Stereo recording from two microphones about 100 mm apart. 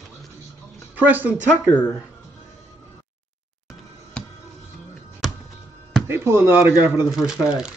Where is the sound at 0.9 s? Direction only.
20° right (ahead or behind).